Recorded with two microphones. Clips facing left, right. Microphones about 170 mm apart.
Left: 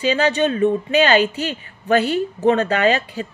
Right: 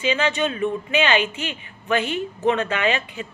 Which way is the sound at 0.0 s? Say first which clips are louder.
Left 4 dB; 35° left (ahead or behind).